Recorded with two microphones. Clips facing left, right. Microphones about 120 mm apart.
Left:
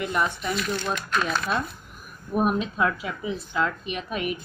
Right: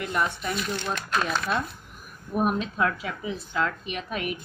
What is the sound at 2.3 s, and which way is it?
A woman's voice, 15° left (ahead or behind).